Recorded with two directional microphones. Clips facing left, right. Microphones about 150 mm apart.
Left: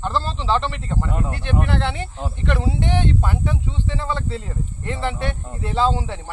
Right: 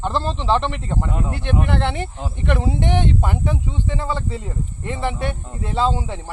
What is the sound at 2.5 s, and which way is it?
Speech, 20° right (ahead or behind).